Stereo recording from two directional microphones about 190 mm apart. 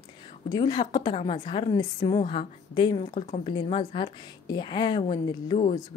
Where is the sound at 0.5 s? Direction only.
20° left (ahead or behind).